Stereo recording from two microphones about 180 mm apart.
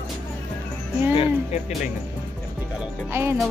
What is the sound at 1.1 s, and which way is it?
Speech, 40° left (ahead or behind).